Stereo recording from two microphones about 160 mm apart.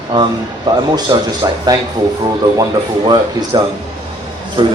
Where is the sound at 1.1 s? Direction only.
25° right (ahead or behind).